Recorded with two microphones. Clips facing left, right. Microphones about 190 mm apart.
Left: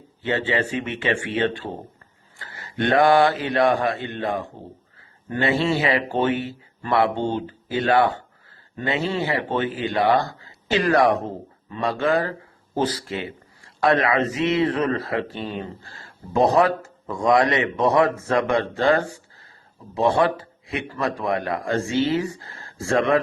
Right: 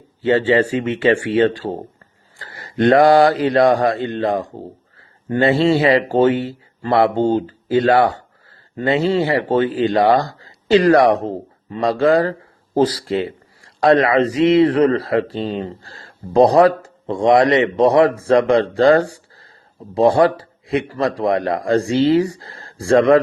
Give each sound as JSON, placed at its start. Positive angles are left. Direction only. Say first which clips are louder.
{"t": 0.3, "sound": "a man's voice", "louder": "right 9 dB", "side_deg": -40}